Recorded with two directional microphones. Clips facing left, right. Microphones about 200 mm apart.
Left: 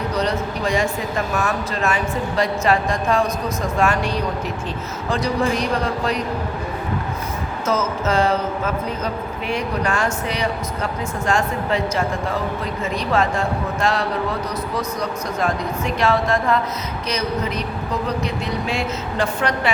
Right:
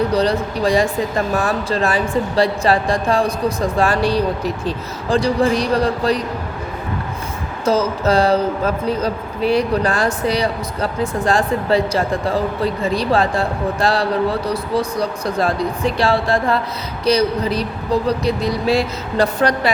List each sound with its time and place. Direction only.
0.1 s a woman's voice: 35° right (ahead or behind)
7.6 s a woman's voice: 35° right (ahead or behind)